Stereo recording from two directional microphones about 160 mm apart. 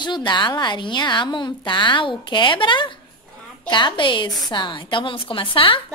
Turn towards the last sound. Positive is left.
turn(degrees=35)  # may be behind; listen again after turning